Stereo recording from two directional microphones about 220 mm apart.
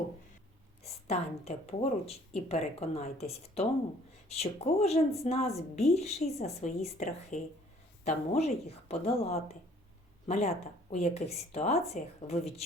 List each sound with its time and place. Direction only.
0.9 s speech: 30° left (ahead or behind)